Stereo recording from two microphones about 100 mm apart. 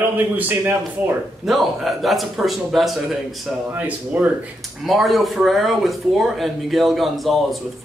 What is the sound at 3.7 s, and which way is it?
Speech, 15° right (ahead or behind).